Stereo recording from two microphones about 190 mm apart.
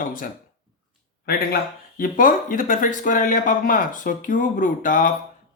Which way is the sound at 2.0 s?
45° left (ahead or behind).